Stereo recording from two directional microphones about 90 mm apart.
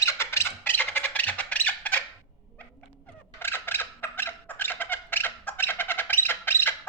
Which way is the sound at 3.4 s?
25° left (ahead or behind).